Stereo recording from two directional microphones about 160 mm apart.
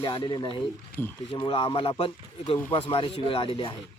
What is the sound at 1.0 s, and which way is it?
Speech, 15° left (ahead or behind).